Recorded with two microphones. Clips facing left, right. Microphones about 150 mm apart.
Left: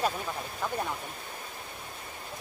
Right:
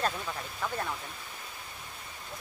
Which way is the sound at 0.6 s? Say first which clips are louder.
Left 2 dB; 10° left (ahead or behind).